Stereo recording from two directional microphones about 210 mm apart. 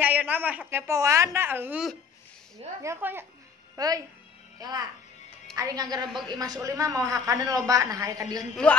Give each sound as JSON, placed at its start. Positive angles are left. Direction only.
{"t": 0.0, "sound": "a woman's voice", "side_deg": -5}